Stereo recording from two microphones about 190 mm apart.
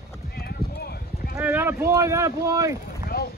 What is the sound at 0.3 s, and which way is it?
Clip-clop, 55° left (ahead or behind).